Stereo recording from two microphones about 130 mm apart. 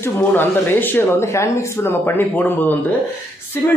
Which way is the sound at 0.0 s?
15° left (ahead or behind).